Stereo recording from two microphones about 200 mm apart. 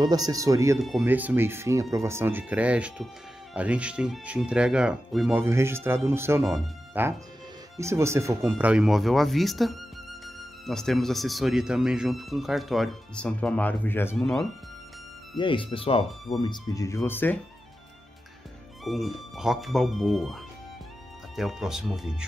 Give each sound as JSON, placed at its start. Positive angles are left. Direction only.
{"t": 0.0, "sound": "speech", "side_deg": -20}
{"t": 0.7, "sound": "speech", "side_deg": 0}
{"t": 15.3, "sound": "speech", "side_deg": 25}
{"t": 18.9, "sound": "speech", "side_deg": 0}
{"t": 21.4, "sound": "speech", "side_deg": 0}